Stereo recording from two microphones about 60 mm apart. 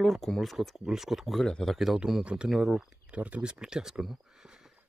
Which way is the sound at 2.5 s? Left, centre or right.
Centre.